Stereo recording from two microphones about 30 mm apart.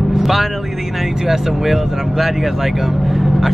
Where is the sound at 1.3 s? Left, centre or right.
Centre.